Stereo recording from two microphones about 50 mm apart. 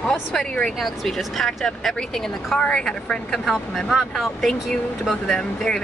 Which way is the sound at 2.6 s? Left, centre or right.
Centre.